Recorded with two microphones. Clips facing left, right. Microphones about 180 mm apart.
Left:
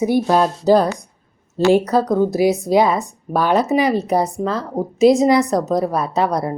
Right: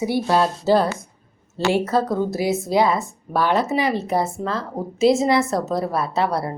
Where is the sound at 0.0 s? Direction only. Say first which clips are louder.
Left 4 dB; 20° left (ahead or behind).